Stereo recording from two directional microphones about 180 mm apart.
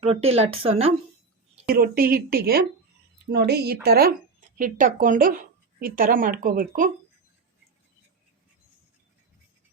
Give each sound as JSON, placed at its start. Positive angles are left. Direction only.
{"t": 0.0, "sound": "speech", "side_deg": -35}
{"t": 1.6, "sound": "speech", "side_deg": -55}